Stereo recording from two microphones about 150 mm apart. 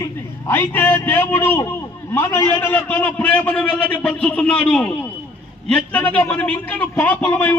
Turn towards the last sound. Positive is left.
turn(degrees=10)  # may be behind; listen again after turning